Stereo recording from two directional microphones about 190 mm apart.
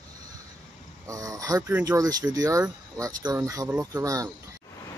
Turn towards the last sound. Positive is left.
turn(degrees=-15)  # may be behind; listen again after turning